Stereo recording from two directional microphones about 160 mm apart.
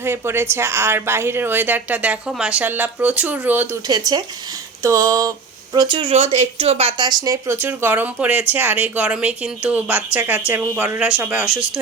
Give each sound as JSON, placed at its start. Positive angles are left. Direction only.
{"t": 0.0, "sound": "speech", "side_deg": -15}
{"t": 3.8, "sound": "a sound", "side_deg": -25}
{"t": 5.7, "sound": "speech", "side_deg": -30}